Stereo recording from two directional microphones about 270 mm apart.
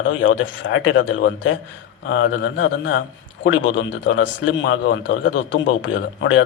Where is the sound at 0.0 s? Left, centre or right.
Left.